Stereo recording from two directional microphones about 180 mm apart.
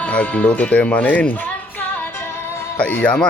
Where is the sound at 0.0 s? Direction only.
5° left (ahead or behind).